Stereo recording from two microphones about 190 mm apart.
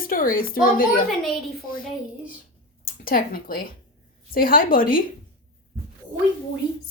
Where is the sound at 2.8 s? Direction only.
50° left (ahead or behind).